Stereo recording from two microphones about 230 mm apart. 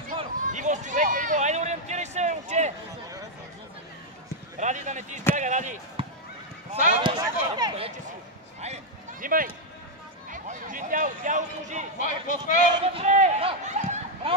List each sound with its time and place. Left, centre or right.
0.2 s run: right
4.6 s speech: right
7.0 s a man's voice: centre
8.5 s a sound: right
10.3 s speech: right
12.0 s speech: left
12.5 s a man's voice: right